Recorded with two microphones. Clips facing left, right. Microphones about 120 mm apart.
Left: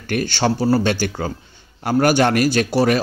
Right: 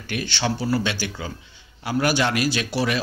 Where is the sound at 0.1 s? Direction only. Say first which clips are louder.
Left 6 dB; 45° left (ahead or behind).